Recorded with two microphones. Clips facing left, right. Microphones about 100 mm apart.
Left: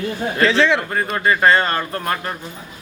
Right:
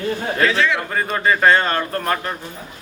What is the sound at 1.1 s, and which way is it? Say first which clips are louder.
Speech: even; centre (ahead or behind).